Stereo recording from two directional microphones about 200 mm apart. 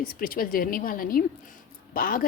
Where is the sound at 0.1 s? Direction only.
45° left (ahead or behind).